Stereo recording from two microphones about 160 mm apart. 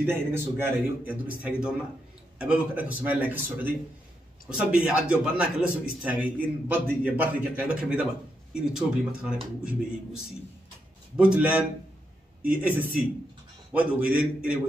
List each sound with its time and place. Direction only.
0.0 s a man's voice: 15° right (ahead or behind)
12.4 s a man's voice: 10° right (ahead or behind)